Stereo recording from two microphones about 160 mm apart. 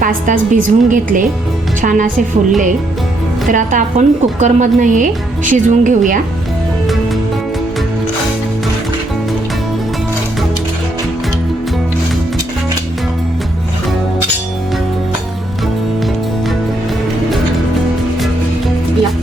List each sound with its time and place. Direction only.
0.0 s a woman's voice: 55° right (ahead or behind)
3.5 s a woman's voice: 55° right (ahead or behind)